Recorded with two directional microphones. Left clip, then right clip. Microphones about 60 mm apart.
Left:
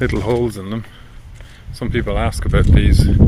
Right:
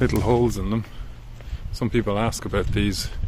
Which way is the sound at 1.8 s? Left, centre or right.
Centre.